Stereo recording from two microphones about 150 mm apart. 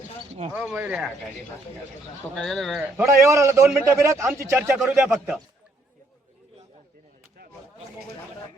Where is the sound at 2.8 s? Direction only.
15° right (ahead or behind).